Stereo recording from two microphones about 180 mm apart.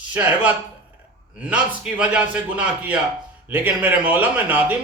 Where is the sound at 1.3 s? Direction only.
5° right (ahead or behind).